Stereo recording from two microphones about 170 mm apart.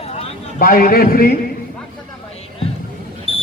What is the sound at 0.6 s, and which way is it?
Speech, 60° left (ahead or behind).